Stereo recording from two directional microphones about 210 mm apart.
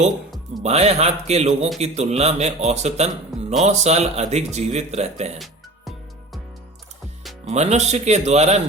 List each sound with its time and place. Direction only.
0.6 s speech: 30° right (ahead or behind)
7.4 s speech: 30° right (ahead or behind)